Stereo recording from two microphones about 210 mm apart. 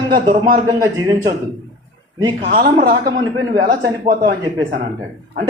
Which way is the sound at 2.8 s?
45° right (ahead or behind).